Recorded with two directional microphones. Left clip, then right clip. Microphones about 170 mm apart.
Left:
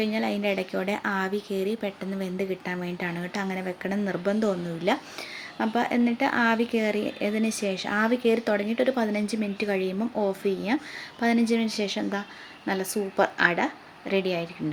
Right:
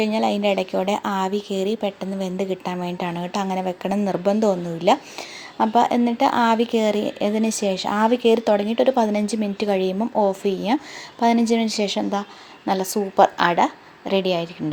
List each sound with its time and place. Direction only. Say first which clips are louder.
0.0 s speech: right 7 dB; 25° right (ahead or behind)